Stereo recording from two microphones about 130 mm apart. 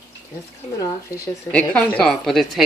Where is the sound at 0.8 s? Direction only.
25° left (ahead or behind).